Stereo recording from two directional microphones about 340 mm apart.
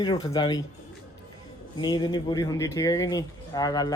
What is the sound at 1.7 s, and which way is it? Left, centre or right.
Speech, centre.